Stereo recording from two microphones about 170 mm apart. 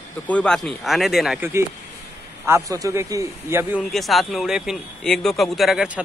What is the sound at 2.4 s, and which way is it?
A man's voice, 15° right (ahead or behind).